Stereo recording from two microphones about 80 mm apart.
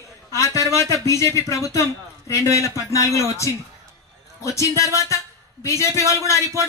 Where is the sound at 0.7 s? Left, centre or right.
Left.